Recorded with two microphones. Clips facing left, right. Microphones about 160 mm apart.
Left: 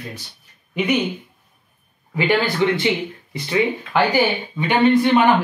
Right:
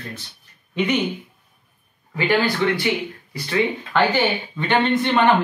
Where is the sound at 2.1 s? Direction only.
20° left (ahead or behind).